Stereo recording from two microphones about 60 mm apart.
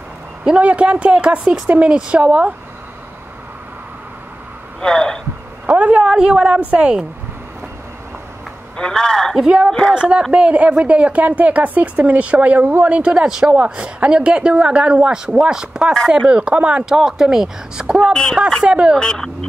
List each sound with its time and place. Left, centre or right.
0.4 s speech: centre
4.8 s speech: centre
5.7 s a sound: right
6.0 s a woman's voice: centre
6.4 s speech: right
8.7 s speech: centre
9.9 s speech: centre
18.9 s speech: centre